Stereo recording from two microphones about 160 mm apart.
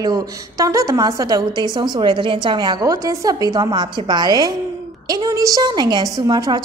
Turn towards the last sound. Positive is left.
turn(degrees=-25)  # may be behind; listen again after turning